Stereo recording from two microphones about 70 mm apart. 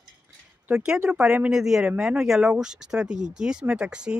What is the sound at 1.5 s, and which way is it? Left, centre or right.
Speech, centre.